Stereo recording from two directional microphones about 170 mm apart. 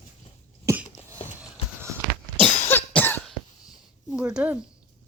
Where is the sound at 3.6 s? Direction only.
5° right (ahead or behind).